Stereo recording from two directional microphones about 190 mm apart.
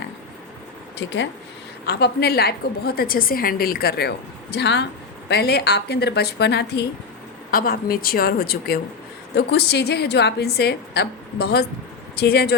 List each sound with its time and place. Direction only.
0.9 s speech: 70° left (ahead or behind)
1.8 s a woman's voice: 60° left (ahead or behind)